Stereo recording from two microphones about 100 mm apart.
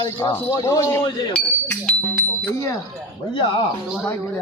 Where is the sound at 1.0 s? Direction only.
55° left (ahead or behind).